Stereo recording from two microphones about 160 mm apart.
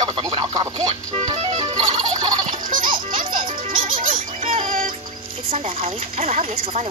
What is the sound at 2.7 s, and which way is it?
Music, 60° right (ahead or behind).